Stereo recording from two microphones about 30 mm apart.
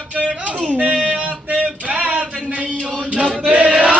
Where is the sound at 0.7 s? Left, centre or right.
Right.